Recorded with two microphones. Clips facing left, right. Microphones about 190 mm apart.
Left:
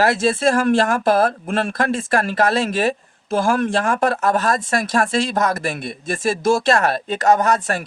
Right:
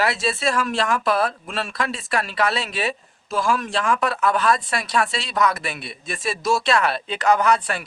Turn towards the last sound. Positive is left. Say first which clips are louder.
# left 2 dB
turn(degrees=45)  # may be behind; listen again after turning